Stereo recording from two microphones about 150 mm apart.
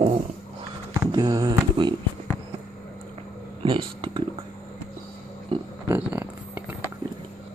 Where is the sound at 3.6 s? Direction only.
35° right (ahead or behind).